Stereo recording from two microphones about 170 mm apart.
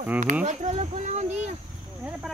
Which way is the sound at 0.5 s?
45° right (ahead or behind).